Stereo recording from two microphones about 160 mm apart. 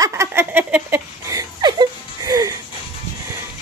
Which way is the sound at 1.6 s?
25° right (ahead or behind).